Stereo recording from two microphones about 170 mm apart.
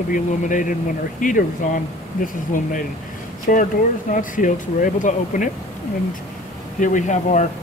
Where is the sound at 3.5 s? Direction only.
55° left (ahead or behind).